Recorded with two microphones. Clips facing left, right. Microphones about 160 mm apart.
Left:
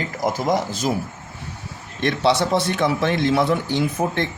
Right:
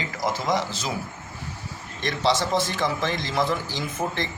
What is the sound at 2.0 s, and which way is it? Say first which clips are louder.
A man's voice: left 5 dB; 60° left (ahead or behind).